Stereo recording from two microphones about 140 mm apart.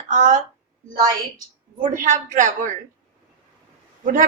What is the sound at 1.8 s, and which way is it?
A woman's voice, 65° right (ahead or behind).